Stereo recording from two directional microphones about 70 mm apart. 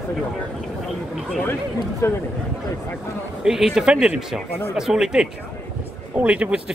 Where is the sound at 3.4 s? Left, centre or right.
Centre.